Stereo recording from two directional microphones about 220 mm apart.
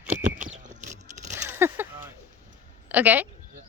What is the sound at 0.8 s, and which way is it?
Scrape, 35° right (ahead or behind).